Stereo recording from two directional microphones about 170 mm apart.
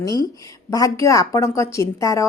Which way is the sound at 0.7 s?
20° left (ahead or behind).